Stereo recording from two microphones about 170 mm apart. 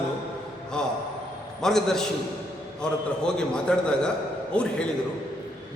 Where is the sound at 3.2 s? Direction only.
5° left (ahead or behind).